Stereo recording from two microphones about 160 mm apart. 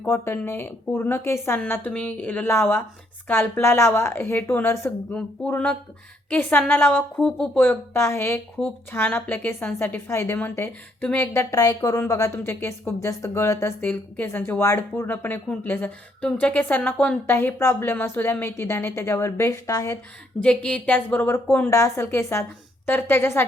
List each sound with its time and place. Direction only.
0.0 s a woman's voice: 15° left (ahead or behind)
20.4 s a woman's voice: 5° left (ahead or behind)